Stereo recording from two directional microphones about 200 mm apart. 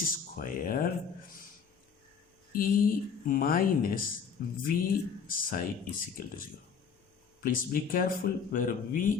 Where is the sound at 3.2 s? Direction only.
45° left (ahead or behind).